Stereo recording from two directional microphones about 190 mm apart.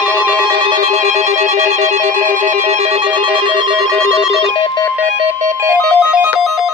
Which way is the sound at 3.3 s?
25° right (ahead or behind).